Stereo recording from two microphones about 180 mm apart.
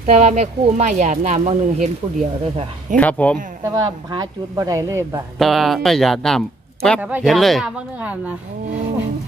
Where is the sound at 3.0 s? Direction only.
10° left (ahead or behind).